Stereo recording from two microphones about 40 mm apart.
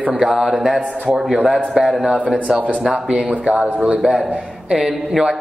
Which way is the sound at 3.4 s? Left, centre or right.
Right.